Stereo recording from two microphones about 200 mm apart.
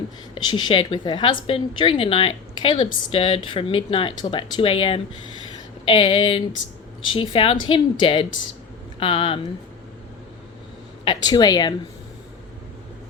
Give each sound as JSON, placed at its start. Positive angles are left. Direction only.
{"t": 0.3, "sound": "a woman's voice", "side_deg": 20}
{"t": 11.0, "sound": "a woman's voice", "side_deg": 20}